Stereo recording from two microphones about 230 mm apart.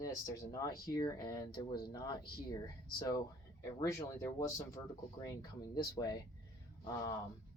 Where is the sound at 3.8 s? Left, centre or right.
Centre.